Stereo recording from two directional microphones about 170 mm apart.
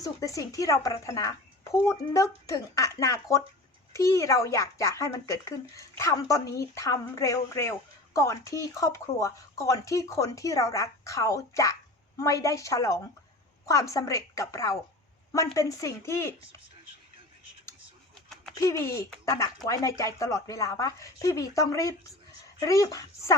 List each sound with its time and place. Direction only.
0.0 s speech: 20° left (ahead or behind)
18.5 s speech: 20° left (ahead or behind)